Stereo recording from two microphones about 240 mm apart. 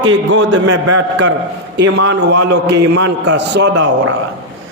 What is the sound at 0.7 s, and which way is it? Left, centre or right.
Speech, right.